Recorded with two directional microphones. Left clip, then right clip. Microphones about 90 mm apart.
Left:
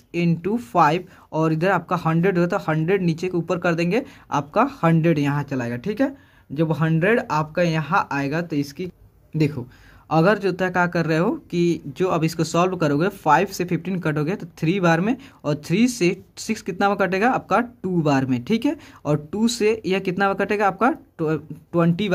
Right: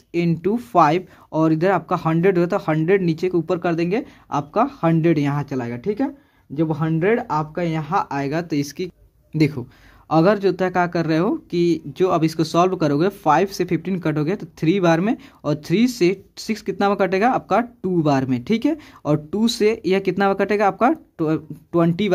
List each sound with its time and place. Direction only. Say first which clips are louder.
0.1 s speech: right 3 dB; 30° right (ahead or behind); by 5.0 s 5° right (ahead or behind)
5.0 s speech: right 2 dB; 25° right (ahead or behind)
5.6 s speech: even; centre (ahead or behind); by 8.4 s 20° right (ahead or behind)
8.4 s speech: right 2 dB; 45° right (ahead or behind)
10.0 s speech: right 2 dB; 20° right (ahead or behind)